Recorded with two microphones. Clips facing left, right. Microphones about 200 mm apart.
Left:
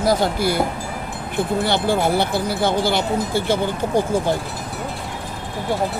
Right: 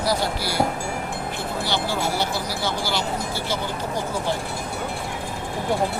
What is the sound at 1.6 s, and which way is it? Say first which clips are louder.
Speech: left 5 dB; 55° left (ahead or behind).